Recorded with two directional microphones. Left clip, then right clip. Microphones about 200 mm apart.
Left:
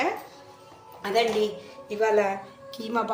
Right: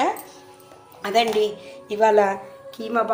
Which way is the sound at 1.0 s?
20° right (ahead or behind).